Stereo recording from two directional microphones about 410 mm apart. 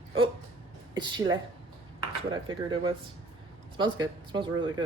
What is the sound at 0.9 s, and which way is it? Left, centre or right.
Speech, centre.